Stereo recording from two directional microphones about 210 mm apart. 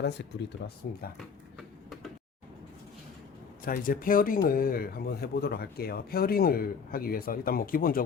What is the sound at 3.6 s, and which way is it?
Speech, 40° left (ahead or behind).